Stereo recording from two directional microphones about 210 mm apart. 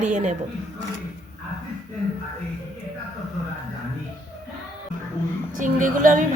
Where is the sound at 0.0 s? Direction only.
35° right (ahead or behind).